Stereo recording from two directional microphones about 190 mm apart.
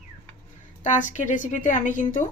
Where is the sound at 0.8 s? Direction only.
40° left (ahead or behind).